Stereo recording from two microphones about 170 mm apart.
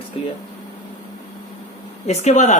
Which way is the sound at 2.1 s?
40° left (ahead or behind).